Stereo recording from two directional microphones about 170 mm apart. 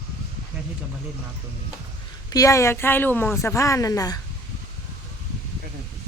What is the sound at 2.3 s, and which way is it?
Speech, 20° left (ahead or behind).